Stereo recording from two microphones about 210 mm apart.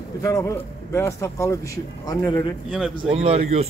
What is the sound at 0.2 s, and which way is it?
Speech, 15° left (ahead or behind).